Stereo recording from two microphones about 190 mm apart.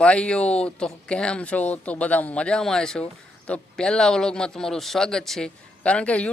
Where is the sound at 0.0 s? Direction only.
5° left (ahead or behind).